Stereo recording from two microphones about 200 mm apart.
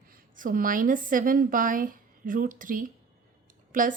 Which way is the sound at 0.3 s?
45° right (ahead or behind).